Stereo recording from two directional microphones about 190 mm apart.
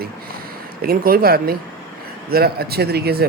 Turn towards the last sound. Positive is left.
turn(degrees=-55)  # may be behind; listen again after turning